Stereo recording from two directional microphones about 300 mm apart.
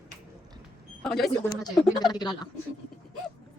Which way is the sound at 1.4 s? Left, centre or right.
Centre.